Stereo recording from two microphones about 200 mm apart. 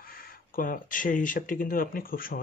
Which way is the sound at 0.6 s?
45° left (ahead or behind).